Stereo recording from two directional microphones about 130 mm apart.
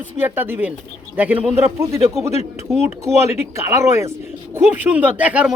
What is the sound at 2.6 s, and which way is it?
Speech, 20° right (ahead or behind).